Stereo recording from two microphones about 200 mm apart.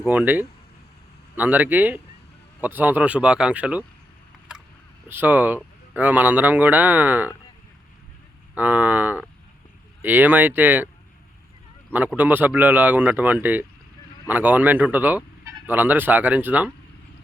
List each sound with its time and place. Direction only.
0.0 s speech: 10° right (ahead or behind)
5.0 s speech: 10° right (ahead or behind)
8.5 s speech: 10° right (ahead or behind)
11.9 s speech: 10° right (ahead or behind)
14.3 s fowl: 10° right (ahead or behind)
15.6 s speech: 10° right (ahead or behind)